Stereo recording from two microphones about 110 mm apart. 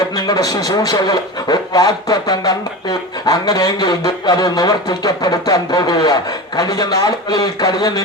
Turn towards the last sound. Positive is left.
turn(degrees=35)  # may be behind; listen again after turning